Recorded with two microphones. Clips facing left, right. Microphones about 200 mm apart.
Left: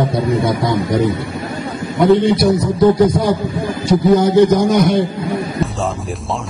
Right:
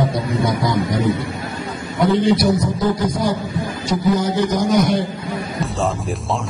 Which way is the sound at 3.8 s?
60° left (ahead or behind).